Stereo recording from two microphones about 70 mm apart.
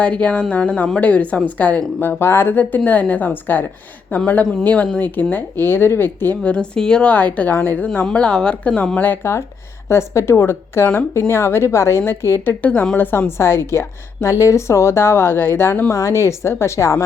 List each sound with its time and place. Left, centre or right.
0.0 s speech: centre
8.0 s speech: centre
9.2 s a woman's voice: left
15.9 s speech: left